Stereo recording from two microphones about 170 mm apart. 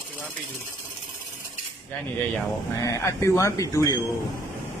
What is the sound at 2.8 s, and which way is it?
Speech, 20° left (ahead or behind).